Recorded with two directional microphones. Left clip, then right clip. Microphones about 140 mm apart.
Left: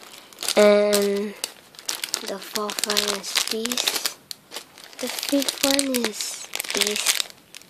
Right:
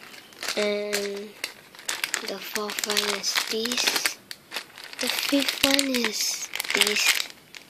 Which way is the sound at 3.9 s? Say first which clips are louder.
Right 1 dB; 5° left (ahead or behind).